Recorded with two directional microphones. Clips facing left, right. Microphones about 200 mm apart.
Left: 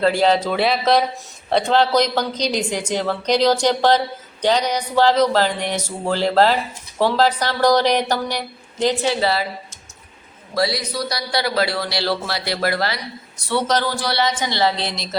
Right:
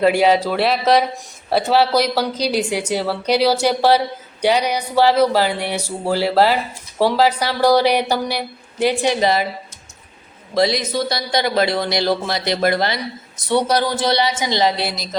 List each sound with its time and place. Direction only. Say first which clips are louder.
0.0 s speech: right 2 dB; 10° right (ahead or behind)
10.5 s a man's voice: right 4 dB; 20° right (ahead or behind); by 15.1 s 5° right (ahead or behind)